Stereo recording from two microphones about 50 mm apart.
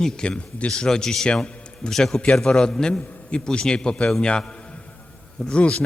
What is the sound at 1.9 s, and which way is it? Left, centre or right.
Speech, centre.